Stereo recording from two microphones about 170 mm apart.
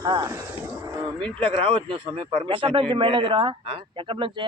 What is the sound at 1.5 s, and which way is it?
A man's voice, 35° right (ahead or behind).